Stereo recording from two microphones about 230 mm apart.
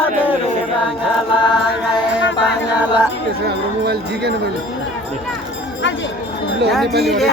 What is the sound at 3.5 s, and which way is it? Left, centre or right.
Speech, right.